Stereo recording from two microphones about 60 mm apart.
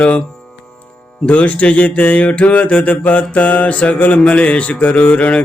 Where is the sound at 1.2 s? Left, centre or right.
Left.